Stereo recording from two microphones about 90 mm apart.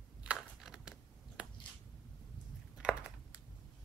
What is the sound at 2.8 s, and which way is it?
Typing, 10° right (ahead or behind).